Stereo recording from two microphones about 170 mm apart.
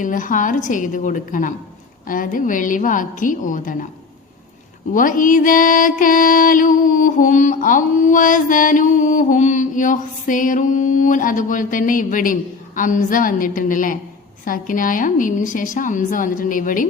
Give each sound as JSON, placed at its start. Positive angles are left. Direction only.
{"t": 0.0, "sound": "music", "side_deg": 50}
{"t": 4.9, "sound": "music", "side_deg": 50}